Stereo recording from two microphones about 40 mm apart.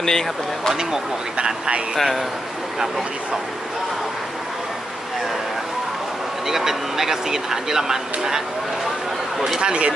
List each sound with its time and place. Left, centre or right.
0.0 s speech: centre
0.7 s speech: centre
2.0 s speech: centre
6.5 s speech: centre
9.6 s speech: right